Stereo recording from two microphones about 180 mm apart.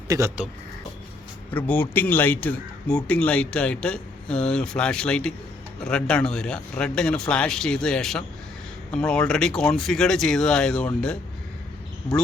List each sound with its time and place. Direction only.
0.1 s speech: 15° right (ahead or behind)
1.5 s speech: 10° left (ahead or behind)